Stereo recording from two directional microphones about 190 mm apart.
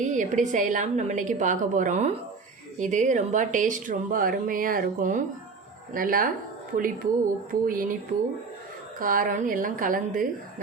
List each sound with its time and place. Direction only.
0.0 s a woman's voice: 40° right (ahead or behind)
9.0 s speech: 45° right (ahead or behind)